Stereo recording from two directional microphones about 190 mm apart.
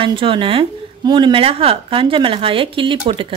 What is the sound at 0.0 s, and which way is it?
Speech, 25° right (ahead or behind).